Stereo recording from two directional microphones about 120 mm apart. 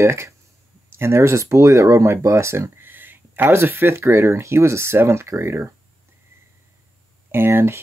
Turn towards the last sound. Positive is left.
turn(degrees=-20)  # may be behind; listen again after turning